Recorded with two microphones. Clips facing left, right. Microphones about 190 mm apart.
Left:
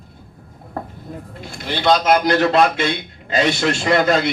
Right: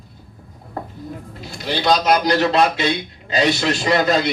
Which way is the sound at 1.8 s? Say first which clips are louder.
Left 1 dB; 55° left (ahead or behind).